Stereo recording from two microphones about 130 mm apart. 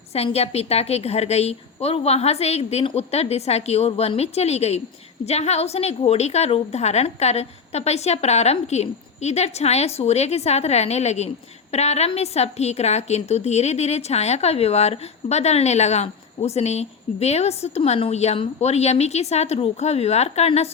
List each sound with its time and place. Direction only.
0.1 s a woman's voice: 50° left (ahead or behind)